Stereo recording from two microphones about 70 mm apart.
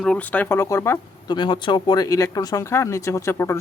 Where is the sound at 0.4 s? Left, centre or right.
Left.